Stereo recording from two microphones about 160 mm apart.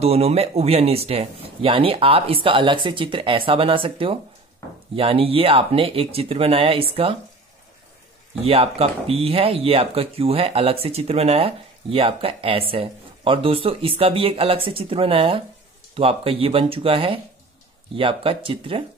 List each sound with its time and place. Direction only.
0.0 s speech: 40° right (ahead or behind)
8.5 s speech: 35° right (ahead or behind)